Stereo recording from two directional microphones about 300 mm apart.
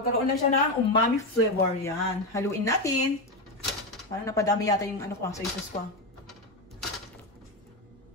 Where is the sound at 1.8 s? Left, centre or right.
Centre.